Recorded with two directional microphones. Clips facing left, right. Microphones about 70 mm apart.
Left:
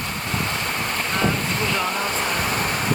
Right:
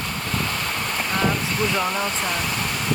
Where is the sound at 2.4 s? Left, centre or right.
Left.